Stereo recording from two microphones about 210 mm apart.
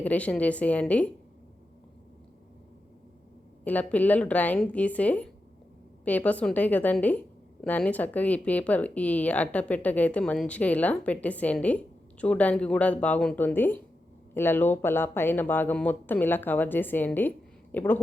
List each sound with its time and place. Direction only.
0.0 s speech: 5° left (ahead or behind)
3.6 s speech: 5° left (ahead or behind)